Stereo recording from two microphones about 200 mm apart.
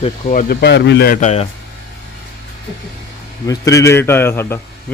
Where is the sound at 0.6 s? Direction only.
60° left (ahead or behind); by 1.5 s 35° left (ahead or behind).